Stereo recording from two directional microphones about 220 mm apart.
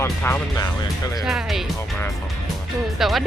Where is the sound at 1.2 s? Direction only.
Centre (ahead or behind).